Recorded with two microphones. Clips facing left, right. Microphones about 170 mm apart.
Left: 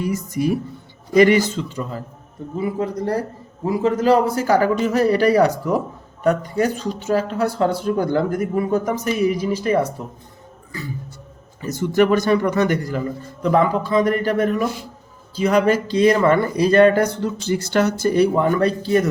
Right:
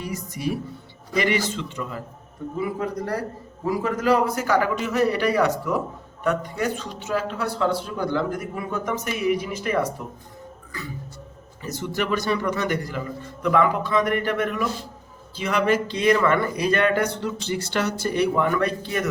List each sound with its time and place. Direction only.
0.0 s a man's voice: 45° left (ahead or behind)
11.6 s speech: 50° left (ahead or behind); by 19.0 s 35° left (ahead or behind)